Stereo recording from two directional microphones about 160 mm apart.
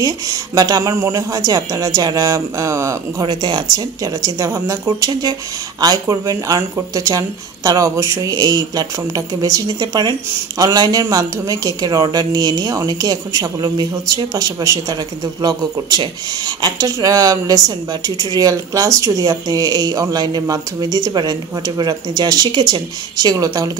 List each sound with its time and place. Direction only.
0.0 s speech: 25° right (ahead or behind)